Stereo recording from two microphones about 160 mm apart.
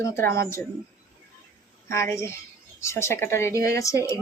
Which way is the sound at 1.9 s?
15° left (ahead or behind).